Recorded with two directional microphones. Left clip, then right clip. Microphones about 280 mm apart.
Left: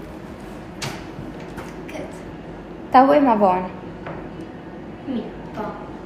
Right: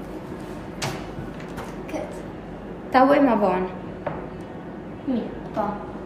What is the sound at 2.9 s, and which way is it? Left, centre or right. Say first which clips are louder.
Speech: left 3 dB; centre.